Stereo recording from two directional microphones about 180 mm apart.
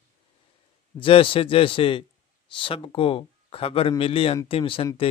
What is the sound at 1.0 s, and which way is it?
A man's voice, 30° left (ahead or behind).